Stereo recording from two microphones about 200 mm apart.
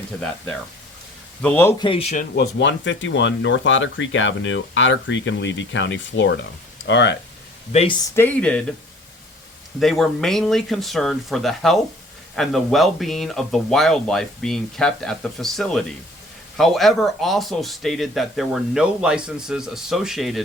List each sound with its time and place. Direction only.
1.4 s speech: 10° left (ahead or behind)
1.8 s speech: 30° left (ahead or behind)
2.3 s speech: 60° left (ahead or behind)
7.7 s speech: 30° left (ahead or behind)
8.1 s speech: 10° left (ahead or behind)
9.8 s speech: centre (ahead or behind)